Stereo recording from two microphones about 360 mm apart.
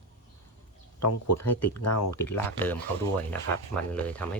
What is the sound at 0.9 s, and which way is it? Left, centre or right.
Speech, left.